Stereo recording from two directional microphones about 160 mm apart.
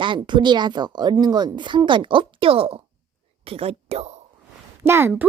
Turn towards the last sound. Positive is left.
turn(degrees=-15)  # may be behind; listen again after turning